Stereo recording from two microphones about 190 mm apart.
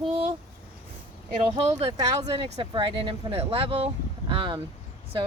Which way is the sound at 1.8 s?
20° right (ahead or behind).